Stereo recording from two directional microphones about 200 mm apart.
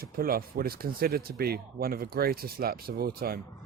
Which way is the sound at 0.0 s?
45° right (ahead or behind).